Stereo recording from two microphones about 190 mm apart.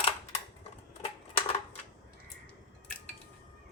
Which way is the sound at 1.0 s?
30° left (ahead or behind).